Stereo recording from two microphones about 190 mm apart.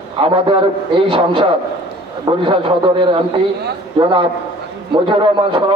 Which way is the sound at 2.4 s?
25° right (ahead or behind).